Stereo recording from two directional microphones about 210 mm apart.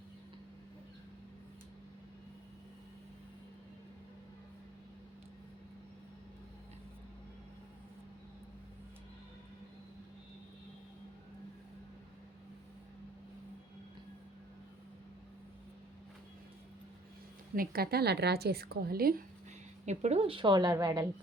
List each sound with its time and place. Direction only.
17.5 s a woman's voice: 45° right (ahead or behind)
19.8 s a woman's voice: 35° right (ahead or behind); by 21.1 s 15° right (ahead or behind)